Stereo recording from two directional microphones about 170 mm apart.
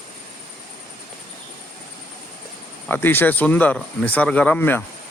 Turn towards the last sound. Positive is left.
turn(degrees=10)  # may be behind; listen again after turning